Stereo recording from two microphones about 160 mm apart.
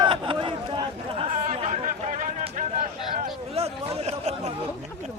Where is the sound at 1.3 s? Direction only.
50° right (ahead or behind).